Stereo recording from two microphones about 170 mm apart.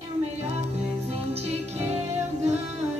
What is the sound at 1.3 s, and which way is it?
Music, 40° right (ahead or behind).